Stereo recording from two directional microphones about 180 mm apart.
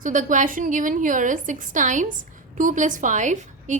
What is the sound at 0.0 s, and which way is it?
A woman's voice, 45° right (ahead or behind).